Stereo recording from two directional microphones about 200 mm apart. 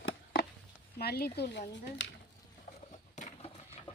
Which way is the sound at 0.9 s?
50° left (ahead or behind).